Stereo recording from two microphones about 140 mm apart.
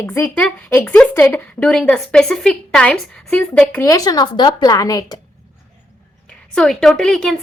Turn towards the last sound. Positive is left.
turn(degrees=5)  # may be behind; listen again after turning